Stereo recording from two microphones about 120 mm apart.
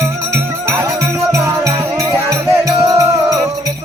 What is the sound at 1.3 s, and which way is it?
Music, 25° right (ahead or behind).